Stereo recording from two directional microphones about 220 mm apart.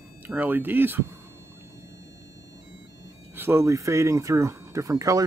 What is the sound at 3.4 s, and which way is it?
Speech, 10° right (ahead or behind).